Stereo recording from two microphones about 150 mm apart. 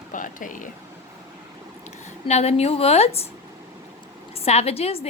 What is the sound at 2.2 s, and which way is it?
A woman's voice, 45° left (ahead or behind).